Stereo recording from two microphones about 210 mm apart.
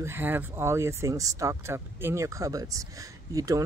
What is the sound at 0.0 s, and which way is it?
Speech, 10° right (ahead or behind).